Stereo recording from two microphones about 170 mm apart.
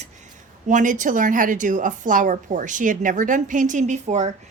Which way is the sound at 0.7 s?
50° right (ahead or behind).